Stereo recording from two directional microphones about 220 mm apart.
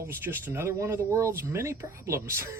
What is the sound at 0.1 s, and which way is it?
Speech, 10° right (ahead or behind).